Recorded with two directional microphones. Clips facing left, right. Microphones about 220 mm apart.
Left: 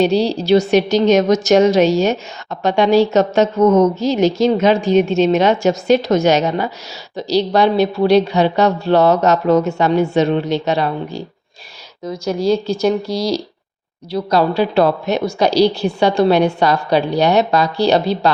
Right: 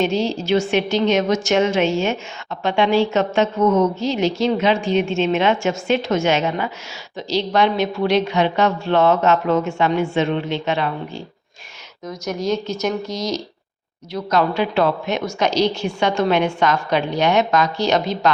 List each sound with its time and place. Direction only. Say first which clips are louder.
0.0 s a woman's voice: left 5 dB; 35° left (ahead or behind)
12.2 s a woman's voice: left 5 dB; 30° left (ahead or behind)